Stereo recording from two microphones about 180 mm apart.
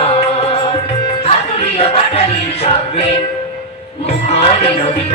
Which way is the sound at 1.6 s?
35° left (ahead or behind).